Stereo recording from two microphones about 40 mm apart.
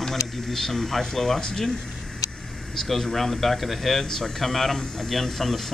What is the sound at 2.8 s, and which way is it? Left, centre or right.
Speech, centre.